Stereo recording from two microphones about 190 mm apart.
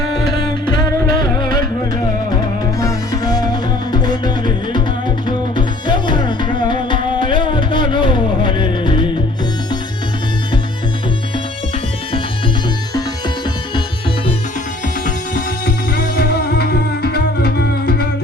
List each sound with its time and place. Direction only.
0.3 s music: 25° left (ahead or behind)
2.8 s music: 20° left (ahead or behind)
15.0 s music: 50° left (ahead or behind)